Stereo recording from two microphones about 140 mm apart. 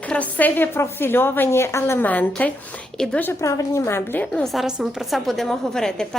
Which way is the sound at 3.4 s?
25° left (ahead or behind).